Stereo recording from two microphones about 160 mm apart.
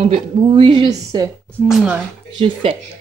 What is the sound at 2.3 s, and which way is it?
Speech, 35° right (ahead or behind).